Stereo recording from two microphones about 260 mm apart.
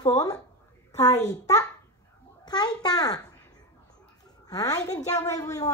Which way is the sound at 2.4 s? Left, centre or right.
Centre.